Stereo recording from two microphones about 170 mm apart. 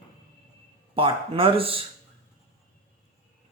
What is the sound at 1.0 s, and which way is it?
Speech, 30° right (ahead or behind).